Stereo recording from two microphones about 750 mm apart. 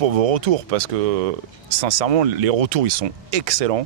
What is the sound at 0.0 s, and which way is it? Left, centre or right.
Speech, right.